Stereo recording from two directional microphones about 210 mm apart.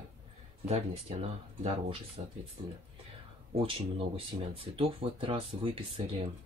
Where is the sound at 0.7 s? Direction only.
30° right (ahead or behind).